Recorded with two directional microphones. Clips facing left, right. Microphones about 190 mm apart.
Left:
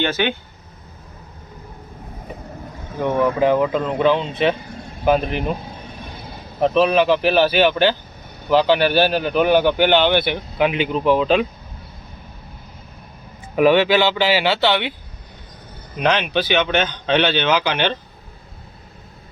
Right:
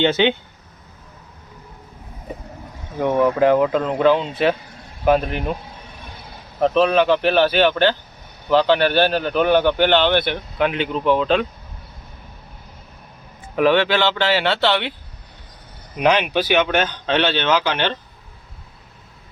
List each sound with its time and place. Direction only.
0.0 s speech: 20° right (ahead or behind)
3.0 s speech: centre (ahead or behind)
6.6 s a man's voice: 5° left (ahead or behind)
13.6 s a man's voice: 10° left (ahead or behind)
16.0 s speech: 10° right (ahead or behind)